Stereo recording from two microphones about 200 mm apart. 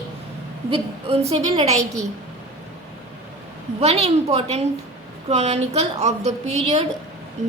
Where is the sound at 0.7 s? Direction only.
30° right (ahead or behind).